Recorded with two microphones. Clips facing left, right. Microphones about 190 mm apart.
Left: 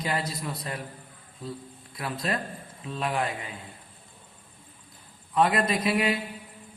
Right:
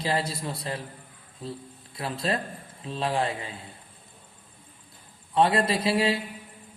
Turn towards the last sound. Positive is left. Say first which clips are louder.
# right 1 dB
turn(degrees=-30)  # may be behind; listen again after turning